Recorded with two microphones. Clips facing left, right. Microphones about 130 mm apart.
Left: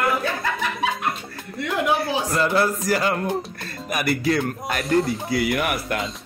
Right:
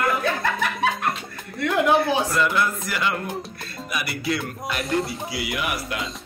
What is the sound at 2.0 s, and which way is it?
A man's voice, 35° left (ahead or behind).